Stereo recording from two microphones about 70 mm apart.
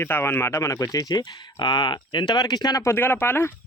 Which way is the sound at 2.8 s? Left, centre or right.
Left.